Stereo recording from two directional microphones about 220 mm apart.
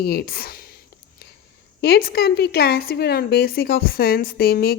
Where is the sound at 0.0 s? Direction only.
45° left (ahead or behind).